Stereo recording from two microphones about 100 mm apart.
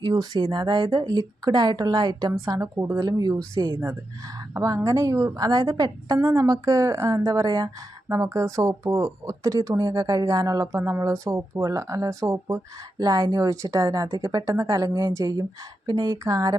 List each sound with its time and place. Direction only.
0.1 s speech: 40° right (ahead or behind)
2.5 s a woman's voice: 30° right (ahead or behind)
3.1 s speech: 40° right (ahead or behind)
3.6 s a woman's voice: 30° right (ahead or behind)
13.0 s speech: 40° right (ahead or behind)